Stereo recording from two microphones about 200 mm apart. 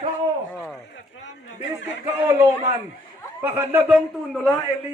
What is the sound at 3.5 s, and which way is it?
Speech, 10° right (ahead or behind).